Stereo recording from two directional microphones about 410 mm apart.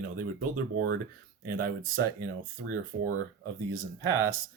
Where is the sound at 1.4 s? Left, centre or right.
Right.